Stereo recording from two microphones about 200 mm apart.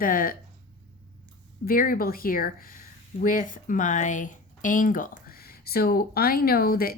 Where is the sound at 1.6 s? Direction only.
45° left (ahead or behind).